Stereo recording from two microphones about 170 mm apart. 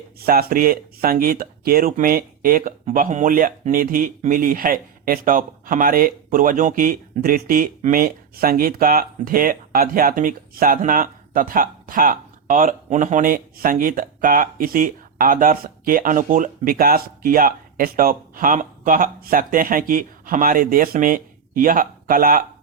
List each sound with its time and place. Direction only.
0.2 s speech: 65° right (ahead or behind)